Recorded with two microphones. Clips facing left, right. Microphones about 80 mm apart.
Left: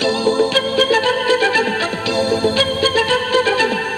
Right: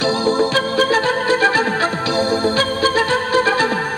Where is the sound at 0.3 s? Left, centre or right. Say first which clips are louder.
Left 2 dB; right.